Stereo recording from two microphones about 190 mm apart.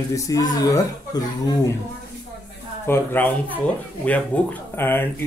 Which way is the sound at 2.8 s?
10° left (ahead or behind).